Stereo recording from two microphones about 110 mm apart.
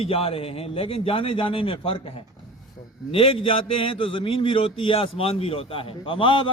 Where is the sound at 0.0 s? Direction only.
60° left (ahead or behind).